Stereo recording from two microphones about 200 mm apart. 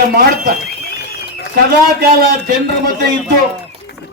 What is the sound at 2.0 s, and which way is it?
Speech, 50° right (ahead or behind).